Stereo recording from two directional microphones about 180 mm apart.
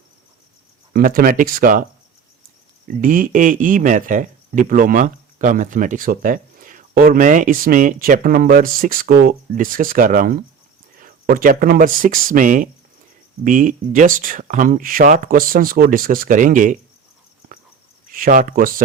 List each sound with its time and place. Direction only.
0.9 s speech: 55° right (ahead or behind)
2.8 s speech: 45° right (ahead or behind)
18.1 s speech: 50° right (ahead or behind)